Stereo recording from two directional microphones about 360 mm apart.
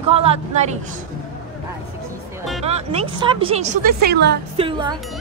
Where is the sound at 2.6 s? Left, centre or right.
Centre.